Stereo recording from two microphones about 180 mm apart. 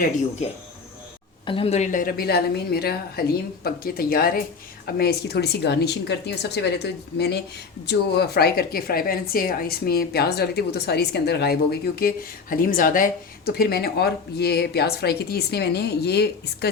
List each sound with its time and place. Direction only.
1.5 s a woman's voice: 30° left (ahead or behind); by 16.6 s 65° left (ahead or behind)